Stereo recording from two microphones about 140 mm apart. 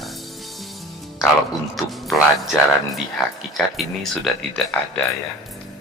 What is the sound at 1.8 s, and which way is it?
Speech, centre (ahead or behind).